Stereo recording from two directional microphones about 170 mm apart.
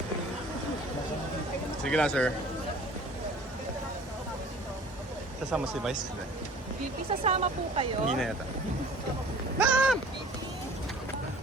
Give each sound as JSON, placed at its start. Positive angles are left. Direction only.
{"t": 1.8, "sound": "speech", "side_deg": 5}
{"t": 5.5, "sound": "speech", "side_deg": -5}
{"t": 7.1, "sound": "speech", "side_deg": -35}
{"t": 9.6, "sound": "a sound", "side_deg": -5}